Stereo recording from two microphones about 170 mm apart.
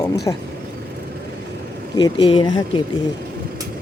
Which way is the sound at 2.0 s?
30° left (ahead or behind).